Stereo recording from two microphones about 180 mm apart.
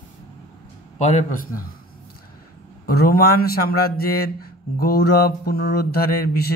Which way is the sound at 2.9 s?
55° left (ahead or behind).